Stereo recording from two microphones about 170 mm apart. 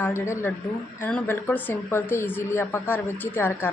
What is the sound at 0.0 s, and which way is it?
A woman's voice, 15° left (ahead or behind).